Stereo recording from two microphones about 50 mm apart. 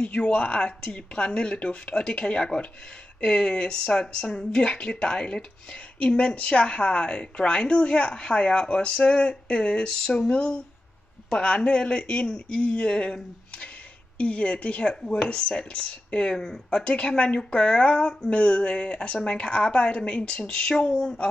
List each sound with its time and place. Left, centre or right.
0.0 s speech: centre
15.0 s speech: centre